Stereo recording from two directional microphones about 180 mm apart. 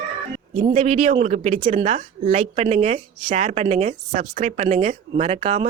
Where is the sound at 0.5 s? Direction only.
45° right (ahead or behind).